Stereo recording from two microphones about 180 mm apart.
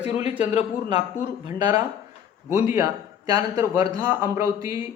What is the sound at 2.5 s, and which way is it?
A man's voice, 15° right (ahead or behind).